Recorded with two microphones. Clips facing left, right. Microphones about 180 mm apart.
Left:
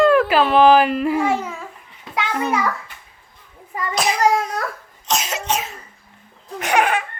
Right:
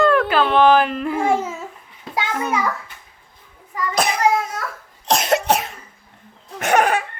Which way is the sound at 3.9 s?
55° right (ahead or behind).